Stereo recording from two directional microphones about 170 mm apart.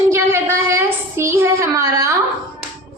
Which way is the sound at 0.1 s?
15° right (ahead or behind).